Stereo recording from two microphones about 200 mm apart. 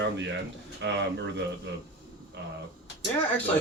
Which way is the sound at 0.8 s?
65° right (ahead or behind).